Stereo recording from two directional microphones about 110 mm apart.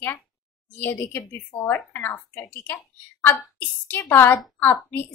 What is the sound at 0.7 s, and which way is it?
A woman's voice, 15° left (ahead or behind).